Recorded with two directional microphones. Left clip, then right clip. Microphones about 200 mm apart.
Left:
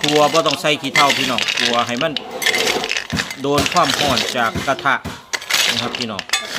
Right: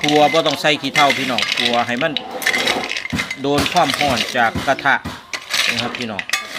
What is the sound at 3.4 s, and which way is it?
Speech, 10° left (ahead or behind).